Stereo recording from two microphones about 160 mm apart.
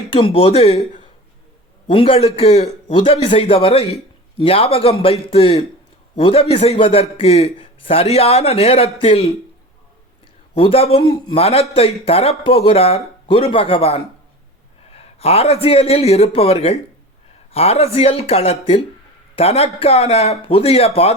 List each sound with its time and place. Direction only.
0.1 s a man's voice: 35° left (ahead or behind)
1.9 s a man's voice: 35° left (ahead or behind)
10.5 s a man's voice: 35° left (ahead or behind)